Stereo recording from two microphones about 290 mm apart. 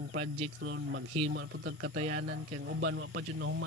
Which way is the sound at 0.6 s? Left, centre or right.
Right.